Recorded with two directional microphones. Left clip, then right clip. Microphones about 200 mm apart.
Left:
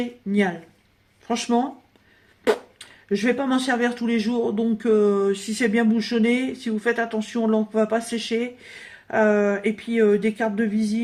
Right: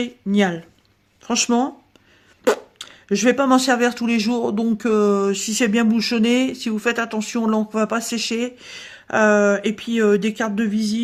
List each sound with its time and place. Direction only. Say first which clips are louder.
0.0 s speech: right 3 dB; 35° right (ahead or behind)